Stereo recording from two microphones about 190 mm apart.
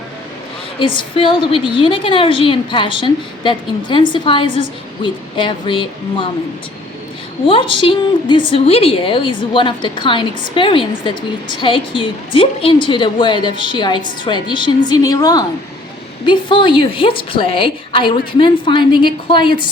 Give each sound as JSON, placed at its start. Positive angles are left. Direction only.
{"t": 0.8, "sound": "a woman's voice", "side_deg": 25}
{"t": 4.4, "sound": "a woman's voice", "side_deg": -35}
{"t": 5.0, "sound": "a woman's voice", "side_deg": 25}
{"t": 7.4, "sound": "a woman's voice", "side_deg": 25}